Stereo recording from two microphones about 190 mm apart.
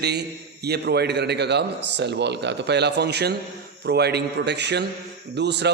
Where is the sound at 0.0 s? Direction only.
60° right (ahead or behind).